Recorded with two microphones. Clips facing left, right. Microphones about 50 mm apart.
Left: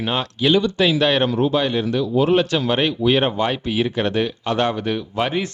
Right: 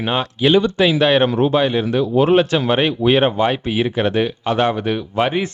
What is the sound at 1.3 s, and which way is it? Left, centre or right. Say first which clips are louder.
Speech: right 2 dB; right.